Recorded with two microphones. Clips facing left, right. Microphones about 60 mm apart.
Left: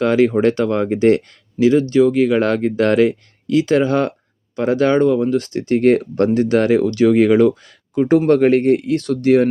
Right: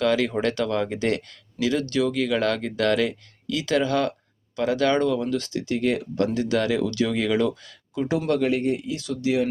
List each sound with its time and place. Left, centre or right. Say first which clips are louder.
0.0 s speech: left 8 dB; left